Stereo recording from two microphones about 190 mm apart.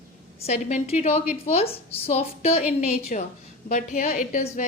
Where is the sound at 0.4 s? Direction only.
35° left (ahead or behind).